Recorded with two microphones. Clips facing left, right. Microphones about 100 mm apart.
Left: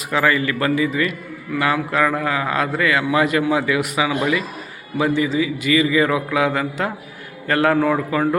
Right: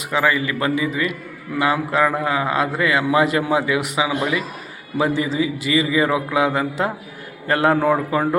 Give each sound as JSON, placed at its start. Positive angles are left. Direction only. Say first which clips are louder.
{"t": 0.1, "sound": "a man's voice", "louder": "left 1 dB", "side_deg": -15}